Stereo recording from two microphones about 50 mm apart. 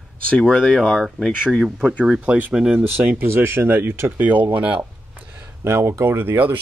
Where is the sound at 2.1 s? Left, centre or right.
Right.